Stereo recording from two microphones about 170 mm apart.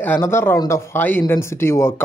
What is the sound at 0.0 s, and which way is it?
Speech, 10° left (ahead or behind).